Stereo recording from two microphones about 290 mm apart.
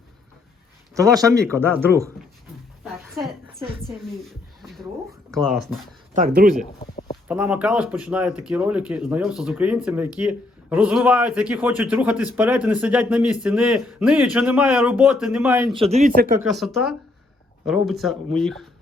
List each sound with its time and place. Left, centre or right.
1.2 s speech: centre
2.8 s music: centre
6.1 s speech: right
7.3 s speech: centre
15.8 s speech: right
16.4 s speech: centre